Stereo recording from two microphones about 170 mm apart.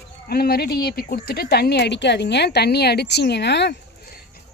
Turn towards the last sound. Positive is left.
turn(degrees=80)